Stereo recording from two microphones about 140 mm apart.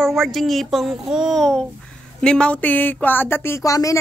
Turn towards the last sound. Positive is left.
turn(degrees=25)  # may be behind; listen again after turning